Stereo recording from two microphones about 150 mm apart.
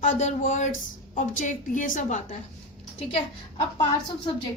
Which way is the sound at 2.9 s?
35° left (ahead or behind).